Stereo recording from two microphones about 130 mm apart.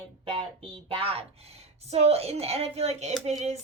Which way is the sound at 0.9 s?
45° right (ahead or behind).